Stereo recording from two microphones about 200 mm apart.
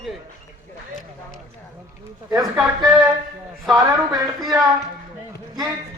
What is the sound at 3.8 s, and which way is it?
Speech, 20° right (ahead or behind).